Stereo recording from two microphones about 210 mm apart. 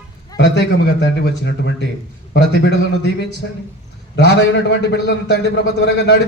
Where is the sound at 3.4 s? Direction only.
55° left (ahead or behind).